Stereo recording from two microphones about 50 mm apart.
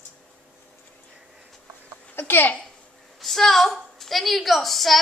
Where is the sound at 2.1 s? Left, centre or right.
Left.